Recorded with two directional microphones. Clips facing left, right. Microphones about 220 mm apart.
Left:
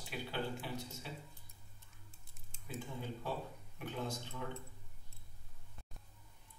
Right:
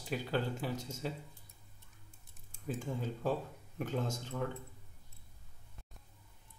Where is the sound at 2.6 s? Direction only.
45° right (ahead or behind).